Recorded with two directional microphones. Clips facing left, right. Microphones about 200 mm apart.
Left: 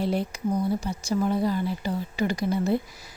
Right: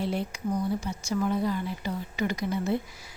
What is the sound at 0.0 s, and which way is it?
Speech, 40° left (ahead or behind).